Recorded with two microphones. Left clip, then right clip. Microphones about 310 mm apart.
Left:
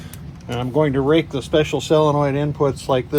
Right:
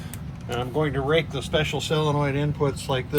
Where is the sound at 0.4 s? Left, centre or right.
Centre.